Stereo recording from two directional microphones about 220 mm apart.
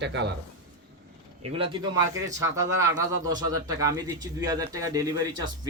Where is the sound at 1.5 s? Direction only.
25° right (ahead or behind).